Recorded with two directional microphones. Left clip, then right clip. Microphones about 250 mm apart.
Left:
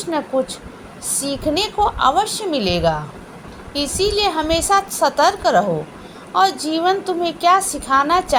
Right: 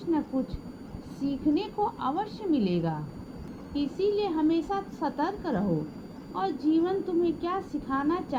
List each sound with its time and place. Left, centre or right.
0.0 s a woman's voice: right